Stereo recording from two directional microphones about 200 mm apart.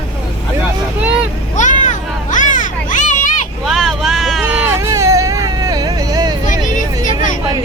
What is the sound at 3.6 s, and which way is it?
Vehicle, centre (ahead or behind).